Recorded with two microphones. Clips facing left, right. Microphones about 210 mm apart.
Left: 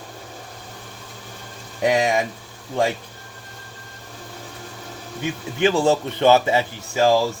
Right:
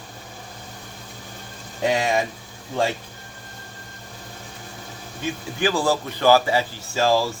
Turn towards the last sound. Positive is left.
turn(degrees=20)  # may be behind; listen again after turning